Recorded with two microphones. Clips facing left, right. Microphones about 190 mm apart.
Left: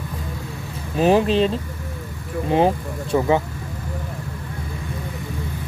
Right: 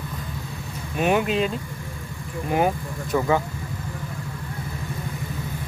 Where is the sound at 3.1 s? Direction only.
20° left (ahead or behind).